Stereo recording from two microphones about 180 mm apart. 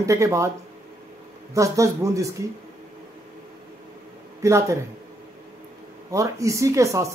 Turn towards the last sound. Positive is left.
turn(degrees=-15)  # may be behind; listen again after turning